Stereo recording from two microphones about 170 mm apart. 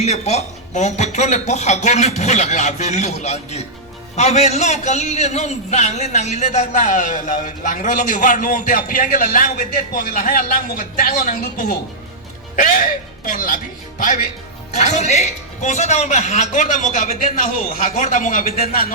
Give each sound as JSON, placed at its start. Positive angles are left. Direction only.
{"t": 0.0, "sound": "a man's voice", "side_deg": 40}
{"t": 14.8, "sound": "a man's voice", "side_deg": 40}